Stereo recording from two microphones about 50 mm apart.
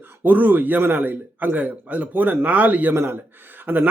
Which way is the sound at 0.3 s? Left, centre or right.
Right.